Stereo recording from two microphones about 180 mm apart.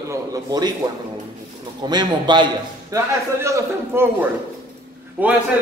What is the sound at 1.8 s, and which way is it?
A man's voice, 25° right (ahead or behind).